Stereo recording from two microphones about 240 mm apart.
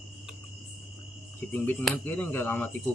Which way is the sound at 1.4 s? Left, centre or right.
Centre.